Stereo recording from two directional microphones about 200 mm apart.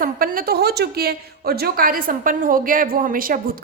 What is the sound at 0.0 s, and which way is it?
A woman's voice, 45° right (ahead or behind).